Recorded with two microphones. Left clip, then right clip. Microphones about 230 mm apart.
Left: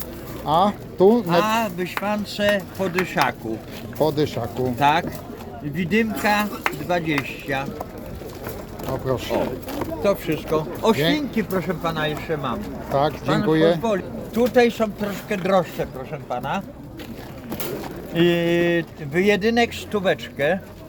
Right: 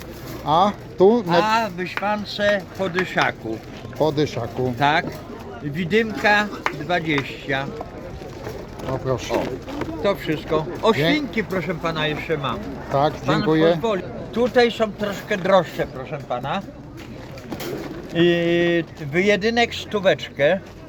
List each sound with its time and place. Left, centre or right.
0.4 s speech: centre
5.7 s speech: centre
9.0 s speech: centre
13.2 s speech: centre
13.5 s speech: centre
16.3 s speech: centre
18.1 s speech: centre